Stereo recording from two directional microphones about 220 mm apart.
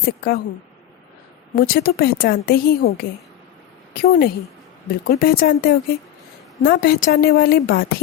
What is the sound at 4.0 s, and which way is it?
A woman's voice, 40° left (ahead or behind).